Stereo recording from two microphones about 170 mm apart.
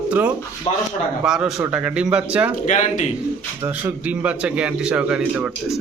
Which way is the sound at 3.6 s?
10° right (ahead or behind).